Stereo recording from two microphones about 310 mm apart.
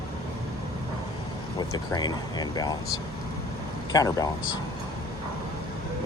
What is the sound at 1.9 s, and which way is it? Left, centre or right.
Speech, centre.